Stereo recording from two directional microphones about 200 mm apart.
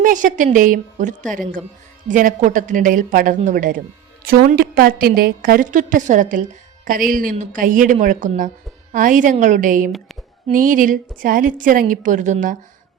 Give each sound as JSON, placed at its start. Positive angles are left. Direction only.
{"t": 0.0, "sound": "a woman's voice", "side_deg": -40}